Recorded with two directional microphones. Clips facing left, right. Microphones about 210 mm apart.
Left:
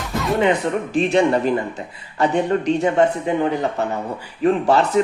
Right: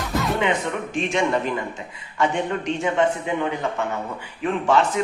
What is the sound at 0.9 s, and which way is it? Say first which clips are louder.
Speech: left 6 dB; 35° left (ahead or behind).